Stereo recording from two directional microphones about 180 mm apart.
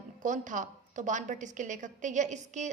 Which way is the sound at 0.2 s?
45° right (ahead or behind).